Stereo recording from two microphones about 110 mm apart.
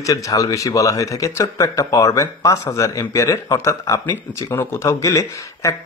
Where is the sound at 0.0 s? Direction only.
30° left (ahead or behind).